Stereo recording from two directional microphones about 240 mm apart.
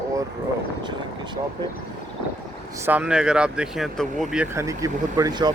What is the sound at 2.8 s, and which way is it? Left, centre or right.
Speech, centre.